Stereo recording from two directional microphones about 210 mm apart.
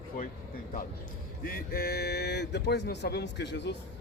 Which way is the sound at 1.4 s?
45° left (ahead or behind).